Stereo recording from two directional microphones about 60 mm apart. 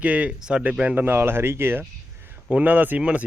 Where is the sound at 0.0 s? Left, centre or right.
Right.